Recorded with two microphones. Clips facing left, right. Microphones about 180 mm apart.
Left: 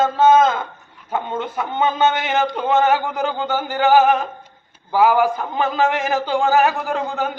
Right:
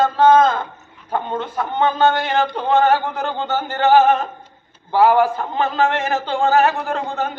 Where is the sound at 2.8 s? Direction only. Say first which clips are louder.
Right 1 dB; 5° left (ahead or behind).